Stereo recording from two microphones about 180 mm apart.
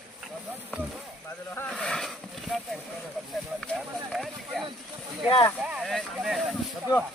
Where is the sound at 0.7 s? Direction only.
5° right (ahead or behind).